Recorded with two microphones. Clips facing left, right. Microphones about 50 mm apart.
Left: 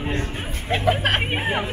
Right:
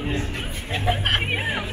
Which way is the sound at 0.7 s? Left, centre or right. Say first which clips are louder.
Left 3 dB; left.